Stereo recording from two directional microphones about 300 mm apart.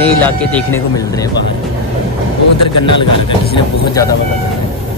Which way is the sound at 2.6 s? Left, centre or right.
Left.